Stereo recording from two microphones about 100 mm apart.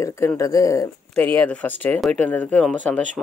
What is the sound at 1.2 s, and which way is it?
Speech, 15° left (ahead or behind).